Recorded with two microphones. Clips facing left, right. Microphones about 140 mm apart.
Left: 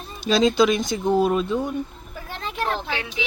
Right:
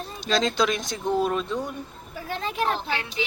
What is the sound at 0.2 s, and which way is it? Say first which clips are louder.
Speech: left 6 dB; 5° left (ahead or behind).